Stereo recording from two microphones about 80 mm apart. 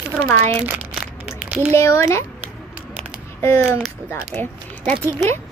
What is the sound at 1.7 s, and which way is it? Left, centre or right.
Speech, left.